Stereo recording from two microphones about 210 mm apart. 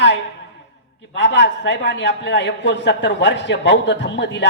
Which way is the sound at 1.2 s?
55° left (ahead or behind).